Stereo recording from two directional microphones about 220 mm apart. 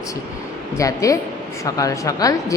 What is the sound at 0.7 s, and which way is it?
Speech, 15° left (ahead or behind).